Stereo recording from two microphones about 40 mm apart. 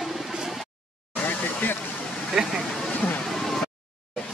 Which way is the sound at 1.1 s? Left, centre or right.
Left.